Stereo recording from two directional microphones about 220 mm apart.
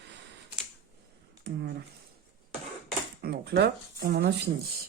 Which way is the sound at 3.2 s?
50° right (ahead or behind).